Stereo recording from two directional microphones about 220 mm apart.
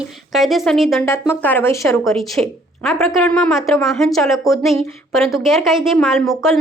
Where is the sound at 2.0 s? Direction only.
Centre (ahead or behind).